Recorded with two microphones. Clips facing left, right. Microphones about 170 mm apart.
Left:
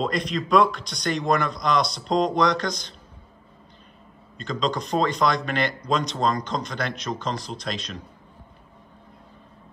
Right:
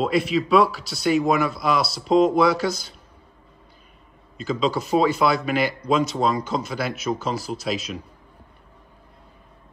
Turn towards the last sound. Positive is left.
turn(degrees=-5)  # may be behind; listen again after turning